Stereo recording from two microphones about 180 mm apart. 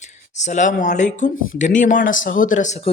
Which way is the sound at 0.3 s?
40° left (ahead or behind).